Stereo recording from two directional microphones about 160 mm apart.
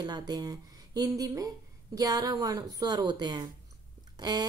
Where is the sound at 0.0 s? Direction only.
25° right (ahead or behind).